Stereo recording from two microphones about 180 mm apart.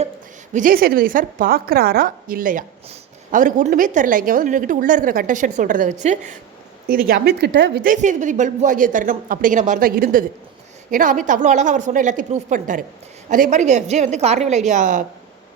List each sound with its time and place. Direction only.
0.5 s a woman's voice: 50° right (ahead or behind)
6.8 s a woman's voice: 55° right (ahead or behind)